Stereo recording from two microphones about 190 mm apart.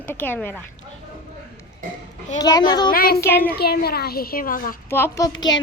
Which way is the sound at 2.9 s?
50° left (ahead or behind).